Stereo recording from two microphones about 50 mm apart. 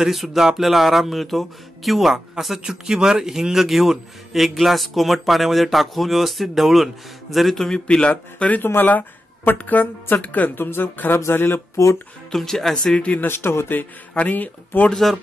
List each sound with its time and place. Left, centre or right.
0.0 s speech: centre
8.1 s a woman's voice: left
10.5 s speech: left
11.7 s speech: left
12.3 s speech: centre
12.9 s speech: left
13.3 s speech: left
14.1 s a woman's voice: left
14.9 s speech: centre